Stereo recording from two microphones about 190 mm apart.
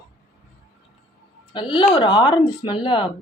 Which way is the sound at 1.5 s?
25° left (ahead or behind).